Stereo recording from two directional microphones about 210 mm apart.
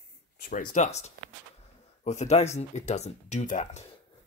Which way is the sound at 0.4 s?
40° left (ahead or behind).